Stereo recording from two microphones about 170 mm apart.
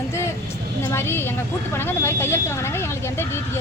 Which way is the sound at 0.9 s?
15° left (ahead or behind).